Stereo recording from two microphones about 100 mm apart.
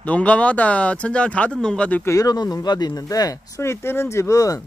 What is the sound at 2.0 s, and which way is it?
Speech, 35° left (ahead or behind).